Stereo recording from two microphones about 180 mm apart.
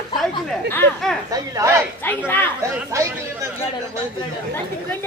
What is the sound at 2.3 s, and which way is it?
Speech, 10° left (ahead or behind).